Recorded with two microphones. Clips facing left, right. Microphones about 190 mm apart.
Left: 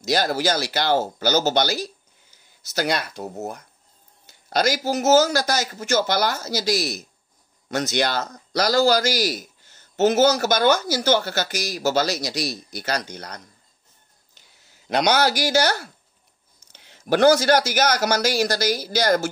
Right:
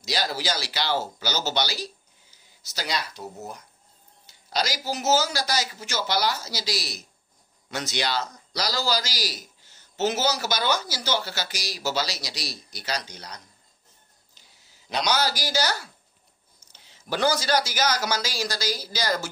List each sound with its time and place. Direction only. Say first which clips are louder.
0.0 s speech: left 7 dB; 50° left (ahead or behind)
14.9 s speech: left 6 dB; 55° left (ahead or behind)